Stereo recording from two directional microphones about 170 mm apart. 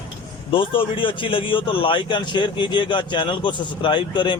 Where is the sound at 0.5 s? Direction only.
30° left (ahead or behind).